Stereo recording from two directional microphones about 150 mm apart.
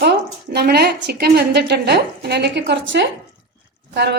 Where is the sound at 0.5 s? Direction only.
90° right.